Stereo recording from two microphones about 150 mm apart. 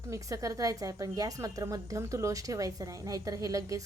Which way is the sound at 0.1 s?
20° right (ahead or behind).